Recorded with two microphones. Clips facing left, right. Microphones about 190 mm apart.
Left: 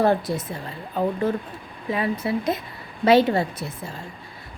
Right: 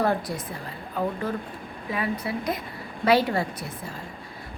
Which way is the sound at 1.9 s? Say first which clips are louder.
Left 4 dB; 25° left (ahead or behind).